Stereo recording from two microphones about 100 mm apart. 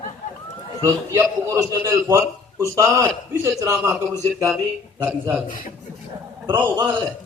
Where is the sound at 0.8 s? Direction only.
30° right (ahead or behind).